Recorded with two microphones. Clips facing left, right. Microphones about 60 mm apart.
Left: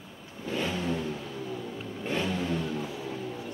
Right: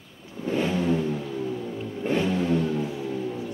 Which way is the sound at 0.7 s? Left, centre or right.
Centre.